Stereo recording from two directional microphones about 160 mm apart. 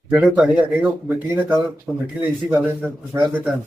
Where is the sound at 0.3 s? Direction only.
5° right (ahead or behind).